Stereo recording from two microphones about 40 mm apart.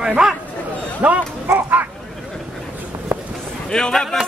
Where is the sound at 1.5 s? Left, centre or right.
Right.